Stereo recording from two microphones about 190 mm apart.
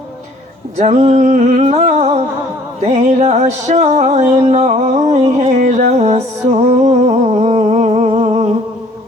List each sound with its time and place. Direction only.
0.8 s music: 35° right (ahead or behind)